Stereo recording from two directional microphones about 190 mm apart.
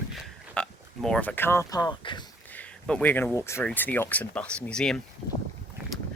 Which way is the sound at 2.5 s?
5° left (ahead or behind).